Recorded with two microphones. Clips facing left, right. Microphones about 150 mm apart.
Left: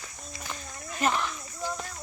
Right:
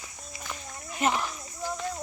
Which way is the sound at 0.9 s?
15° right (ahead or behind).